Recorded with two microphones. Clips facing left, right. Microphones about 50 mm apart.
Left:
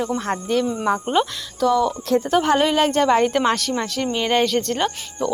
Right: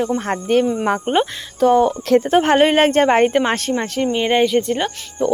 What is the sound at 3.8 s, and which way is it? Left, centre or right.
Speech, right.